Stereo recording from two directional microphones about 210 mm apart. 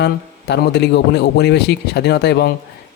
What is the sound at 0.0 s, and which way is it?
Speech, 55° left (ahead or behind).